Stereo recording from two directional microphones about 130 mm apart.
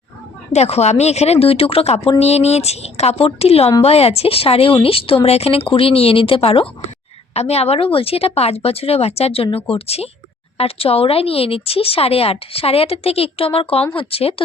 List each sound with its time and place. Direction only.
0.5 s speech: 55° left (ahead or behind)